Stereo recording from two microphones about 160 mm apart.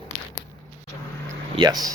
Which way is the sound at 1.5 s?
25° right (ahead or behind).